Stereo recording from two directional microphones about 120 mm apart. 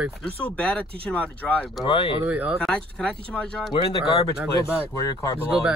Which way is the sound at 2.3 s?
10° right (ahead or behind).